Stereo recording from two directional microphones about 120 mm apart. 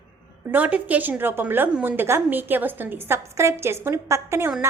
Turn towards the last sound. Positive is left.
turn(degrees=-20)  # may be behind; listen again after turning